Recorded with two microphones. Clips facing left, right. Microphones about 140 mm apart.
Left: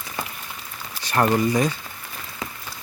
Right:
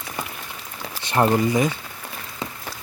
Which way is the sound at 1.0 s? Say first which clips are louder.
Right 1 dB; 20° right (ahead or behind).